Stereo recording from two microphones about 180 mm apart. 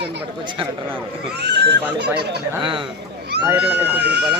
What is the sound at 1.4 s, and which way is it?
Speech, 70° right (ahead or behind).